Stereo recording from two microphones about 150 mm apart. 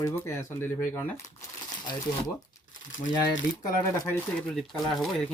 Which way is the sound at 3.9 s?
15° left (ahead or behind).